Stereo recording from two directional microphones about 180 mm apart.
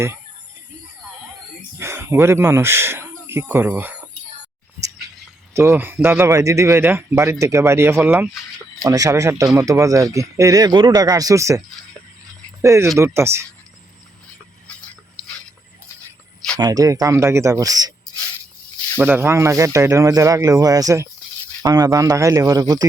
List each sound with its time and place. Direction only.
1.8 s speech: 15° right (ahead or behind)
5.5 s speech: 15° right (ahead or behind)
12.6 s speech: 15° right (ahead or behind)
16.6 s speech: 20° right (ahead or behind)
18.9 s speech: 10° right (ahead or behind)